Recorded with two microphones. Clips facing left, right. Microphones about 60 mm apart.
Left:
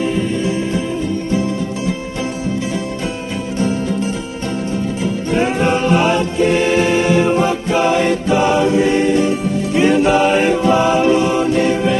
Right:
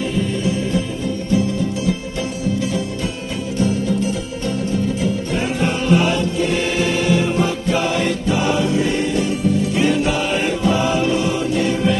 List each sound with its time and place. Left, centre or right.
5.3 s music: left